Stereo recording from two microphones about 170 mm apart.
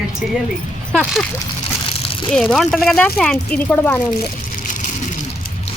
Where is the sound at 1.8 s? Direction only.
30° left (ahead or behind).